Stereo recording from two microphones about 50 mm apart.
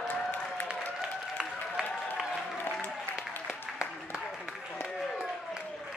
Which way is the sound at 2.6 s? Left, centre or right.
Left.